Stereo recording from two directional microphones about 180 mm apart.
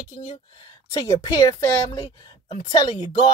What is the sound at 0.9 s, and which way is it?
Speech, 15° left (ahead or behind).